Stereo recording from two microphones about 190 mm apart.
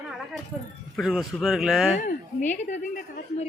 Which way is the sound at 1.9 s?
40° left (ahead or behind).